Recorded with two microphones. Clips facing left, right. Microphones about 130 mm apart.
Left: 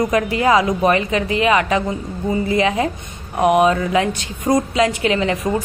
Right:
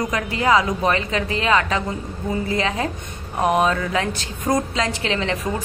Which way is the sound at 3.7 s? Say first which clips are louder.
Left 5 dB; 20° left (ahead or behind).